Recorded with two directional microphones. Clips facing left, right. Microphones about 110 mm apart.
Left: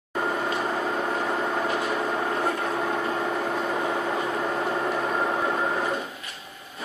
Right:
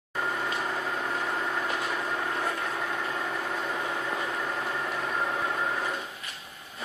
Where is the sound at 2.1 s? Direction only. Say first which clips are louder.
Left 5 dB; 45° left (ahead or behind).